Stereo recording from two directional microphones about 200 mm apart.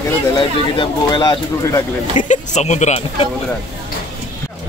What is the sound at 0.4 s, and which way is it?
Speech, 25° left (ahead or behind).